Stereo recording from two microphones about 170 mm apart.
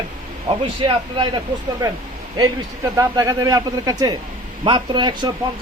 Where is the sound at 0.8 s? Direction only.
30° right (ahead or behind).